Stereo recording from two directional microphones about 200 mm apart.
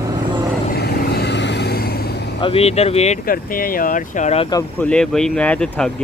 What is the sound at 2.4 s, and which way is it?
Speech, 30° left (ahead or behind).